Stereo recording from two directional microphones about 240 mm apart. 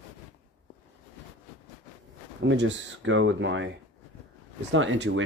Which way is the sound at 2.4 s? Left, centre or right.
Right.